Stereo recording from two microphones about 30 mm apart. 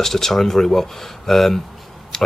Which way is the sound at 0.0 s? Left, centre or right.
Centre.